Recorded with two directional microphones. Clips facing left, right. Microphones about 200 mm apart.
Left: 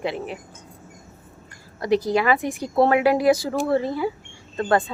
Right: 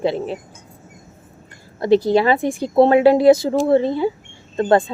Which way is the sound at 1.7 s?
25° right (ahead or behind).